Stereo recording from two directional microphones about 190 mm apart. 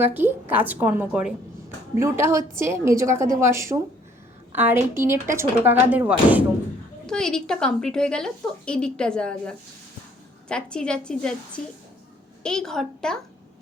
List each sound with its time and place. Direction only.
0.0 s speech: 10° right (ahead or behind)
7.1 s a woman's voice: 5° left (ahead or behind)